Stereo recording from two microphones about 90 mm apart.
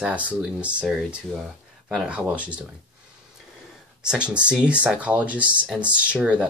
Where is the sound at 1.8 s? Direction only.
5° right (ahead or behind).